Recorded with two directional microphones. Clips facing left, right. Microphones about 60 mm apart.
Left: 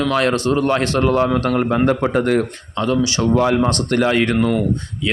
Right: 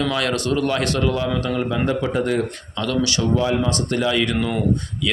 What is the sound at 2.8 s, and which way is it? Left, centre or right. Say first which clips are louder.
Speech: left 4 dB; left.